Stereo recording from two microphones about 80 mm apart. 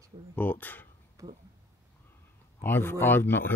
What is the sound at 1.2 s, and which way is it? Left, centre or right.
Speech, right.